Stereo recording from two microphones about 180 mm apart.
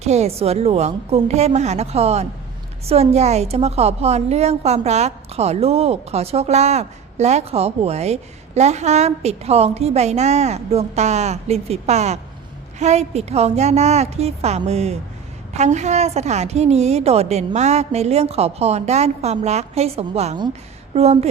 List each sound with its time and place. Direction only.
0.0 s a woman's voice: 35° right (ahead or behind)